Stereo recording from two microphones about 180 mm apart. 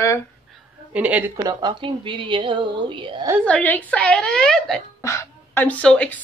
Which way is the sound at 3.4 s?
10° left (ahead or behind).